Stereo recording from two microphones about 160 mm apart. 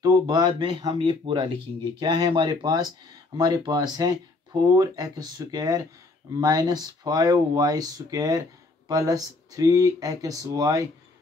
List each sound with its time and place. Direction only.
0.0 s speech: 25° right (ahead or behind)